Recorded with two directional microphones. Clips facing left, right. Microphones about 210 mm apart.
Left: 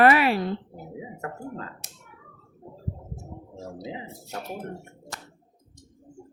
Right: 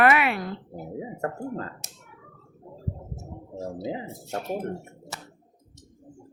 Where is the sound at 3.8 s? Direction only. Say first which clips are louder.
Right 4 dB; 40° right (ahead or behind).